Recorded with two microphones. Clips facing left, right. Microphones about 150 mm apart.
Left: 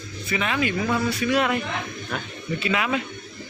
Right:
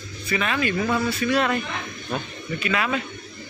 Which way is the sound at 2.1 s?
25° right (ahead or behind).